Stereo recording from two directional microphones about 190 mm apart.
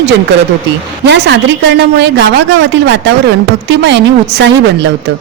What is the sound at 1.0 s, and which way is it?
A woman's voice, 65° right (ahead or behind).